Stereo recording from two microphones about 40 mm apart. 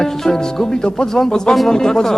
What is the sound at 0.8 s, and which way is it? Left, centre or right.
Music, centre.